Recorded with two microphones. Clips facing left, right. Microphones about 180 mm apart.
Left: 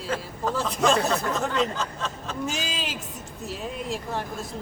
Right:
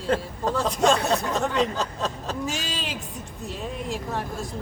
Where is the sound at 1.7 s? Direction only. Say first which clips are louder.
Right 3 dB; 35° right (ahead or behind).